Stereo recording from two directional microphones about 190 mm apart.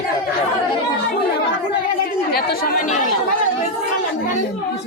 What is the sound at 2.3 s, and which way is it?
Speech, 50° left (ahead or behind).